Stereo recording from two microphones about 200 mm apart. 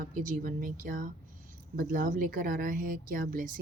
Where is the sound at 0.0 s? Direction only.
40° right (ahead or behind).